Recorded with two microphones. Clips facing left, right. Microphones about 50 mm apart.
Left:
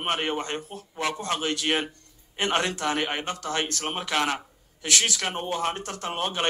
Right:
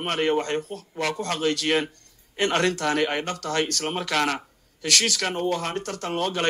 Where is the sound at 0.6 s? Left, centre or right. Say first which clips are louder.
Right 4 dB; right.